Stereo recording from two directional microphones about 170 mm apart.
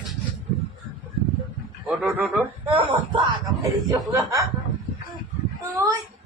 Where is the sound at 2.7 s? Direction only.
30° right (ahead or behind).